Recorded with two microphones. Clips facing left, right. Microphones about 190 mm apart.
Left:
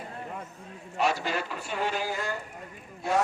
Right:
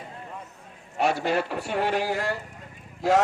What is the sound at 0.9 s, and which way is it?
A man's voice, 60° right (ahead or behind).